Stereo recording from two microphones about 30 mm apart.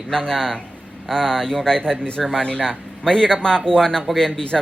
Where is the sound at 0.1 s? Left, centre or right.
Left.